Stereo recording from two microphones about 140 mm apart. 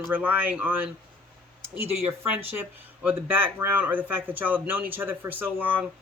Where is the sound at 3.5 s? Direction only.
15° right (ahead or behind).